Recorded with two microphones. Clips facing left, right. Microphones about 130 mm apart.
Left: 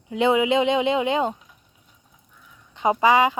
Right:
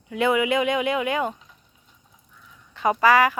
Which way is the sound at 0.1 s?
20° left (ahead or behind).